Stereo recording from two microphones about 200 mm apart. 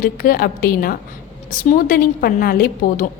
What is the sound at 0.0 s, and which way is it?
A woman's voice, 45° left (ahead or behind).